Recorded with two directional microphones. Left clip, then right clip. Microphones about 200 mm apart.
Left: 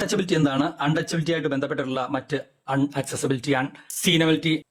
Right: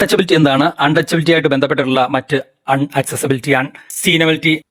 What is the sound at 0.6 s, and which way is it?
Speech, 35° right (ahead or behind).